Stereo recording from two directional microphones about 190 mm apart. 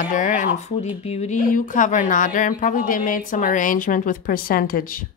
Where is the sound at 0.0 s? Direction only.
45° left (ahead or behind).